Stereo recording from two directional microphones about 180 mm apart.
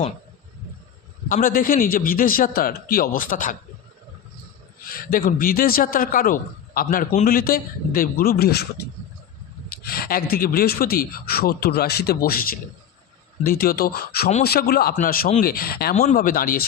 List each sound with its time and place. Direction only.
1.3 s a man's voice: 50° left (ahead or behind)
4.9 s a man's voice: 55° left (ahead or behind)
9.6 s a man's voice: 60° left (ahead or behind)
16.0 s a man's voice: 45° left (ahead or behind)